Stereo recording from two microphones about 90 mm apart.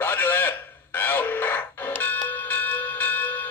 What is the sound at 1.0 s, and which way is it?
Bell, 20° left (ahead or behind).